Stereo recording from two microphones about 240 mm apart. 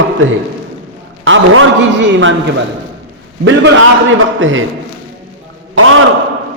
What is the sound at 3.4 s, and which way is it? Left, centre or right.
A man's voice, right.